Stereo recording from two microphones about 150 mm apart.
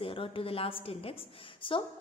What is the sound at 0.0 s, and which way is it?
A woman's voice, 35° left (ahead or behind).